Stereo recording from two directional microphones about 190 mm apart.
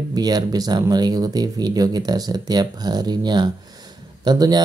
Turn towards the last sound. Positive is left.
turn(degrees=-20)  # may be behind; listen again after turning